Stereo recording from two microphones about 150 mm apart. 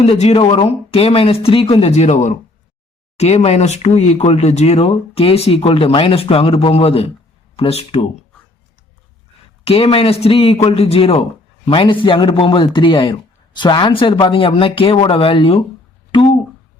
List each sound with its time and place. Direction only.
0.0 s speech: 40° left (ahead or behind)
9.6 s speech: 40° left (ahead or behind)
16.1 s a sound: 35° left (ahead or behind)